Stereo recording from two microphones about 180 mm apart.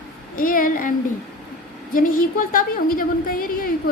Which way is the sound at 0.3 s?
50° left (ahead or behind).